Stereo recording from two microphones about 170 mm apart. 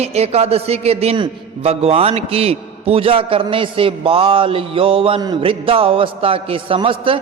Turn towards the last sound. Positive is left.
turn(degrees=-30)  # may be behind; listen again after turning